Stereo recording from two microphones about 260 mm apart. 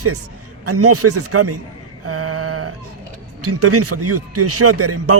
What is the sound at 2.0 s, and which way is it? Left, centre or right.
Mantra, right.